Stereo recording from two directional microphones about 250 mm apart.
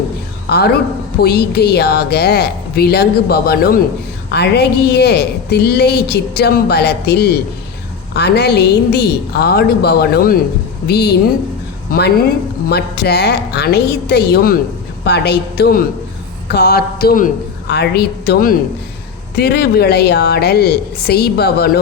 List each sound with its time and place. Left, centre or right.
0.4 s a woman's voice: left